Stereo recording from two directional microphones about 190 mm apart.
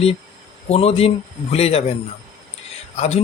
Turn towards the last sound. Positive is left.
turn(degrees=35)  # may be behind; listen again after turning